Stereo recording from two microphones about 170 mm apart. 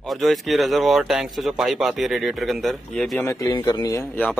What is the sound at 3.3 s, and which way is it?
Speech, 20° left (ahead or behind).